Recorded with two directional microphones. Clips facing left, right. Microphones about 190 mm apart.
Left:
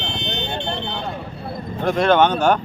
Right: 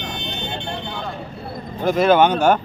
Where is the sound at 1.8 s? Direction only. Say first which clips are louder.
Right 1 dB; 5° right (ahead or behind).